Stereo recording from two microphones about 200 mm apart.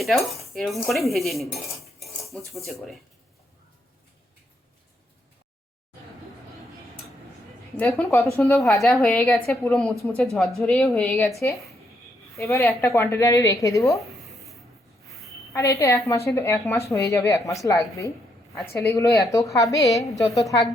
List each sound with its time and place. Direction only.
0.0 s speech: centre (ahead or behind)
7.8 s a woman's voice: 5° left (ahead or behind)
9.9 s speech: 15° right (ahead or behind)
10.6 s speech: 5° left (ahead or behind)
11.3 s a woman's voice: 15° left (ahead or behind)
13.9 s a sound: centre (ahead or behind)
15.5 s a woman's voice: 15° left (ahead or behind)